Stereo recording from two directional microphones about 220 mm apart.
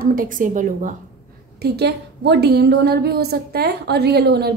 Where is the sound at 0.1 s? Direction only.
40° right (ahead or behind).